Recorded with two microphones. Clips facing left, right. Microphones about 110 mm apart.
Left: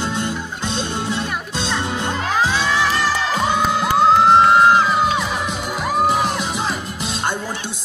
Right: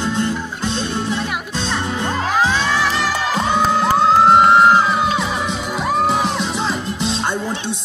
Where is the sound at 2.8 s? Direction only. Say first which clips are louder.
Even; centre (ahead or behind).